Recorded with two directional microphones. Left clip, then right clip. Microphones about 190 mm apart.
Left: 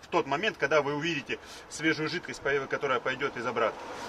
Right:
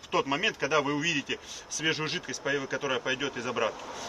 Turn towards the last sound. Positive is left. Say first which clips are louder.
# left 1 dB
turn(degrees=10)  # may be behind; listen again after turning